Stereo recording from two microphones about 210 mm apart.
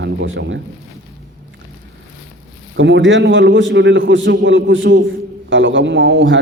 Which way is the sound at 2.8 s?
65° right (ahead or behind).